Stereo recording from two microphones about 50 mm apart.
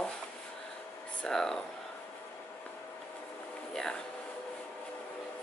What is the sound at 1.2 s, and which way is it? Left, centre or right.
Speech, centre.